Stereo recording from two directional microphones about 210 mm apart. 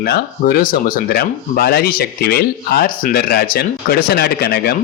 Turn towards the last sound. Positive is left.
turn(degrees=50)  # may be behind; listen again after turning